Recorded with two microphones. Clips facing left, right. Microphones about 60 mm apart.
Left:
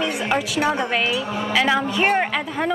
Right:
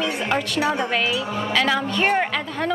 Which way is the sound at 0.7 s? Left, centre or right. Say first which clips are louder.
Left 1 dB; centre.